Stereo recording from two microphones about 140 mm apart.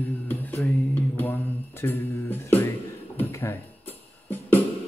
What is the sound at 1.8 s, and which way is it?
Music, 15° left (ahead or behind).